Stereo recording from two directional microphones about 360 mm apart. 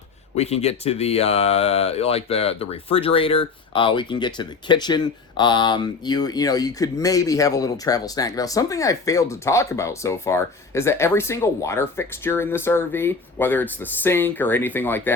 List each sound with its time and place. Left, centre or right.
0.3 s speech: centre